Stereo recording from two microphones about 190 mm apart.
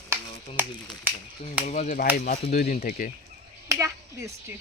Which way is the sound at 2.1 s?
45° left (ahead or behind).